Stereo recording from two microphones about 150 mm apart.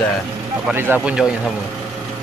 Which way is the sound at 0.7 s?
15° right (ahead or behind).